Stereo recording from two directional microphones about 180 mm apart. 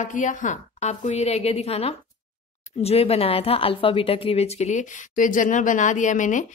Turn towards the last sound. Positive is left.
turn(degrees=45)  # may be behind; listen again after turning